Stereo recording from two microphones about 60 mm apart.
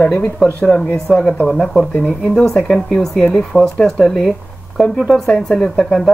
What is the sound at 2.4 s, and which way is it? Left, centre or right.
Speech, centre.